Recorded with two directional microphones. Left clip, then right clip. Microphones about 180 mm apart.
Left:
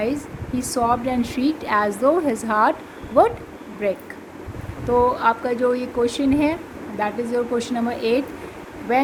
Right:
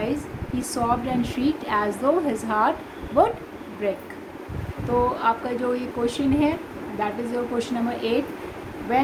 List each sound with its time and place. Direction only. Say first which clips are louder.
0.6 s a woman's voice: left 4 dB; 50° left (ahead or behind)
5.1 s a woman's voice: left 3 dB; 50° left (ahead or behind)